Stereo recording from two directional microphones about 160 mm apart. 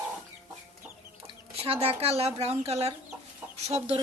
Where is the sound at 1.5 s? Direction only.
40° right (ahead or behind).